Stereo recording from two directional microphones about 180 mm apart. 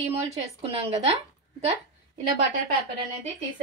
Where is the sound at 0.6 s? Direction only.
30° right (ahead or behind).